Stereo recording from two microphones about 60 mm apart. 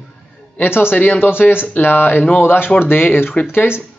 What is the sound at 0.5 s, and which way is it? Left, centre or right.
Speech, left.